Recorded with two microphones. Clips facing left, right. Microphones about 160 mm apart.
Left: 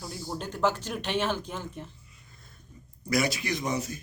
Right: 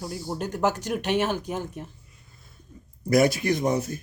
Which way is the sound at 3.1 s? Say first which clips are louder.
Right 7 dB; 55° right (ahead or behind).